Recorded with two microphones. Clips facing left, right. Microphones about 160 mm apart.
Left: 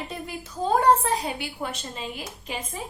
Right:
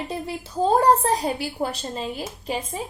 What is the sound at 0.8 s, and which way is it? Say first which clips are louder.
A woman's voice: right 2 dB; 40° right (ahead or behind).